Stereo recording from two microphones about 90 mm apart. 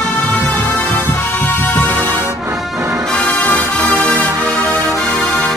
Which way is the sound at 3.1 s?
10° left (ahead or behind).